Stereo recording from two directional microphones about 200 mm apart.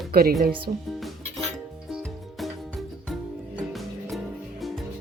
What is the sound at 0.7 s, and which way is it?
Speech, 40° right (ahead or behind).